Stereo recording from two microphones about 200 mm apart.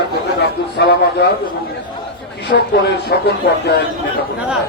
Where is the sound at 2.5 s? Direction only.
55° left (ahead or behind).